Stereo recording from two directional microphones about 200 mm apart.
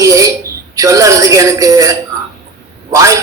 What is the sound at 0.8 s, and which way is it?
A man's voice, 15° right (ahead or behind).